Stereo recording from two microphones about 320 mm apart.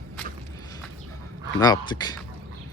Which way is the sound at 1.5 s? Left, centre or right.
Centre.